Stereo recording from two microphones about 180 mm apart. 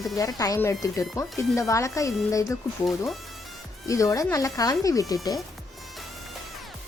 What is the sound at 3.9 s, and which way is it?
Speech, 20° left (ahead or behind).